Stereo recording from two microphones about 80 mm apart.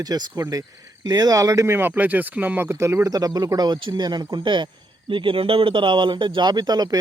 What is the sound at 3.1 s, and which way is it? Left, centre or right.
Speech, right.